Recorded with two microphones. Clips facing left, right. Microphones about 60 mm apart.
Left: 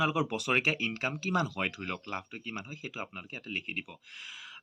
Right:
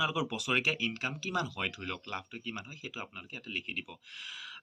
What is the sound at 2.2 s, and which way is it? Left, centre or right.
Speech, left.